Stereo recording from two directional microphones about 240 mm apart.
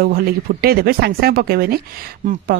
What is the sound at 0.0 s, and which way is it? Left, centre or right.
Speech, right.